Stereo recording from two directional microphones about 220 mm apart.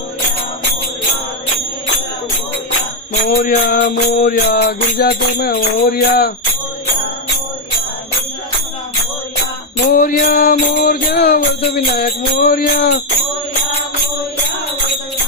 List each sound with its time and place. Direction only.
3.2 s music: 35° left (ahead or behind)
9.9 s music: 40° left (ahead or behind)